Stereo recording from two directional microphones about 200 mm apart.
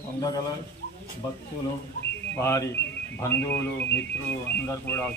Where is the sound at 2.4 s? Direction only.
15° left (ahead or behind).